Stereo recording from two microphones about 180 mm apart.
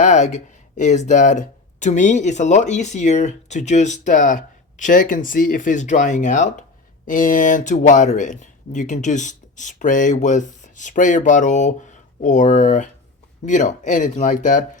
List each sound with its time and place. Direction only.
0.0 s speech: 40° left (ahead or behind)